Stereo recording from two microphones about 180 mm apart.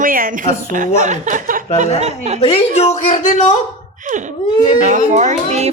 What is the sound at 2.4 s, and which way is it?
Speech, 40° left (ahead or behind).